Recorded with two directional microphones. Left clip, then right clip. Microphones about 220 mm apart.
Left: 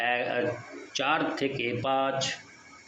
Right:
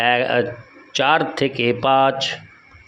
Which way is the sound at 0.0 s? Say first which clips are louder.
Right 10 dB; 50° right (ahead or behind).